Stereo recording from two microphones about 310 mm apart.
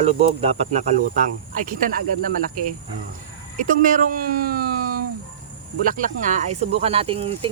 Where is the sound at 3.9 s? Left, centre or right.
Right.